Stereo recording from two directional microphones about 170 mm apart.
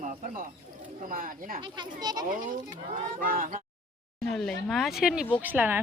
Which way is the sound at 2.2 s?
50° right (ahead or behind).